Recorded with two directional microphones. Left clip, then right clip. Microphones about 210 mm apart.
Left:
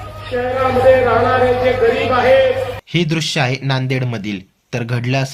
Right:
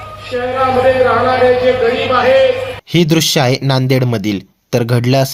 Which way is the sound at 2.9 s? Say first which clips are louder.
Right 9 dB; 40° right (ahead or behind).